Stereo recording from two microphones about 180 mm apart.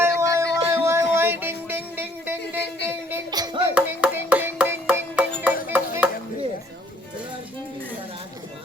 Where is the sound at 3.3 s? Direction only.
20° right (ahead or behind).